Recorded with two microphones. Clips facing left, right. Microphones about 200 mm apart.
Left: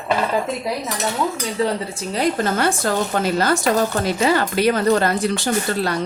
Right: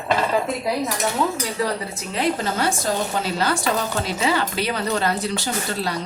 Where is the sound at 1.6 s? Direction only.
30° left (ahead or behind).